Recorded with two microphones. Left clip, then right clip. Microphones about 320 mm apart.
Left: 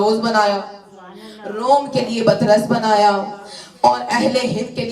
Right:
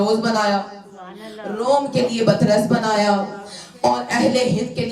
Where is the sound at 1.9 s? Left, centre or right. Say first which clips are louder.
Left 2 dB; centre.